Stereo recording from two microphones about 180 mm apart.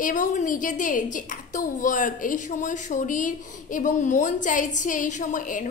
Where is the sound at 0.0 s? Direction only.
45° left (ahead or behind).